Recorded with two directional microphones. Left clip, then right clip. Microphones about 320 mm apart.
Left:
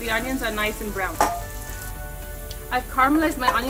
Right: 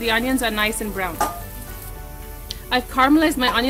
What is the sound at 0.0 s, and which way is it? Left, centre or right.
Speech, right.